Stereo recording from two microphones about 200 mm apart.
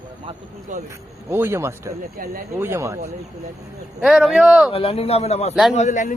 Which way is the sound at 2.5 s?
10° right (ahead or behind).